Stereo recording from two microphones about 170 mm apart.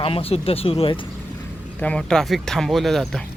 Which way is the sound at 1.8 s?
5° left (ahead or behind).